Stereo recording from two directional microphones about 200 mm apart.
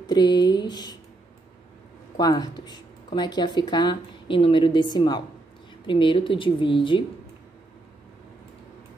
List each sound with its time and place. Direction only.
0.0 s speech: 20° left (ahead or behind)
2.1 s speech: 20° left (ahead or behind)